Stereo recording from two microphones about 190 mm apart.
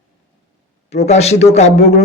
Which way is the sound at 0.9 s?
35° left (ahead or behind).